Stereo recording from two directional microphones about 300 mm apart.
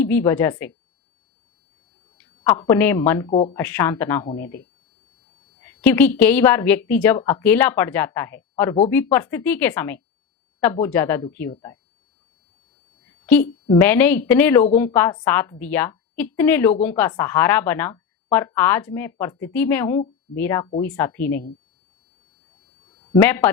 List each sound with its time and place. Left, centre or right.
0.0 s a woman's voice: centre
2.1 s a woman's voice: centre
3.2 s speech: centre
3.5 s a woman's voice: centre
5.6 s a woman's voice: centre
13.2 s a woman's voice: centre
23.0 s a sound: centre
23.2 s a woman's voice: centre